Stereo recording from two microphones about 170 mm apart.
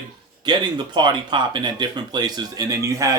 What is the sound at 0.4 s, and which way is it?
Speech, 25° right (ahead or behind).